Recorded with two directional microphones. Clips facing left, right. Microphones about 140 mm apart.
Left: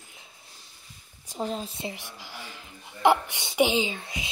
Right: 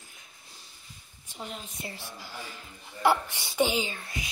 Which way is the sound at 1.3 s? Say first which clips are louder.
Left 9 dB; 35° left (ahead or behind).